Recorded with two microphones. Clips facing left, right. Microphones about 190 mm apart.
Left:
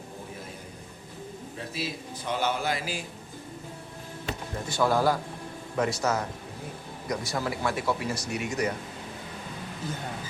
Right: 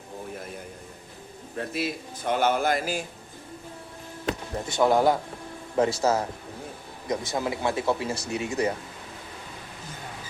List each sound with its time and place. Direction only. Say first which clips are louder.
1.5 s a man's voice: right 6 dB; 55° right (ahead or behind)
4.7 s speech: right 3 dB; 20° right (ahead or behind)